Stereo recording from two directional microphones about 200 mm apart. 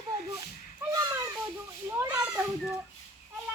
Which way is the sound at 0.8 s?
15° right (ahead or behind).